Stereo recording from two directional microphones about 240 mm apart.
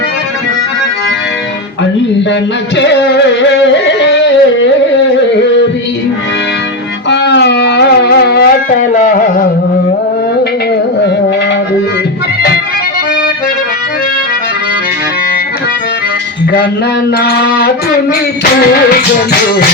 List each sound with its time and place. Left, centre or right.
2.7 s music: left
7.1 s music: left
17.2 s music: left